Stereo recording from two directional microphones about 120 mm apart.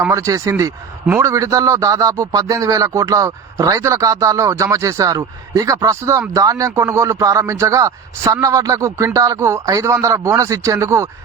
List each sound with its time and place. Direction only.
0.1 s speech: 25° right (ahead or behind)